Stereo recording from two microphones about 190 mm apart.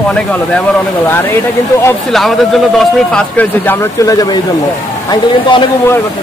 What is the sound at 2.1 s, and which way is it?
Speech, centre (ahead or behind).